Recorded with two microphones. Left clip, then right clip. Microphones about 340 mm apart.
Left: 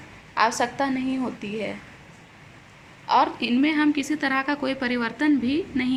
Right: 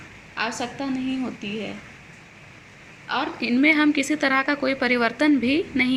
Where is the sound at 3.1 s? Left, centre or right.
Centre.